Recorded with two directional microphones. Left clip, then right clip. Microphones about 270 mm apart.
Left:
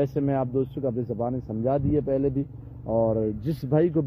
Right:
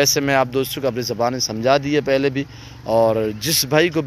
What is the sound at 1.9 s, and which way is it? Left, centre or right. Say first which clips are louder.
Speech: right 7 dB; centre.